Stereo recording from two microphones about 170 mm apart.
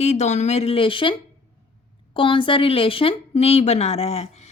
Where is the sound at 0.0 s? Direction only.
40° left (ahead or behind).